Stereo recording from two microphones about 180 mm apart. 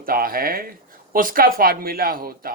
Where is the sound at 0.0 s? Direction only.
55° right (ahead or behind).